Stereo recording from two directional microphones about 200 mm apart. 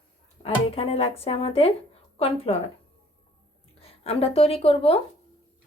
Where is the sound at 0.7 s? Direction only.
30° left (ahead or behind).